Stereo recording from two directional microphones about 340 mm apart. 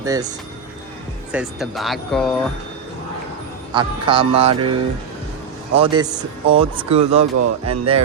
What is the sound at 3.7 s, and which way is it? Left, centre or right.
Speech, centre.